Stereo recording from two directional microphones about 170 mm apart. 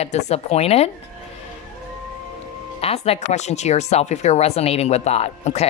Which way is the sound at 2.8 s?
35° left (ahead or behind).